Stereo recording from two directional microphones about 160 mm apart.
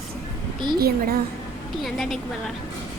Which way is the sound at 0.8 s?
70° right (ahead or behind).